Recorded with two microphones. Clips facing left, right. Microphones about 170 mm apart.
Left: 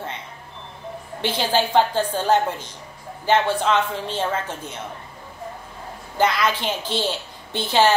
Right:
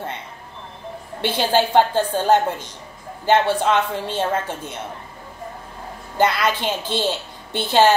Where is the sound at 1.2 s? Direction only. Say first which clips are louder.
Right 3 dB; 15° right (ahead or behind).